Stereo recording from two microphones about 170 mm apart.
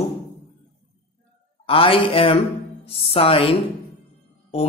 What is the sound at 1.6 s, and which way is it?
Speech, 30° left (ahead or behind).